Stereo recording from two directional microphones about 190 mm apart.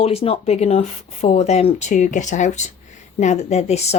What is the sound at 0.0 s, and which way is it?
Speech, 30° left (ahead or behind).